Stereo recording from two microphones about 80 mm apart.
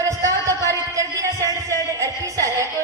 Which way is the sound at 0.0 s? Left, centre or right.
Right.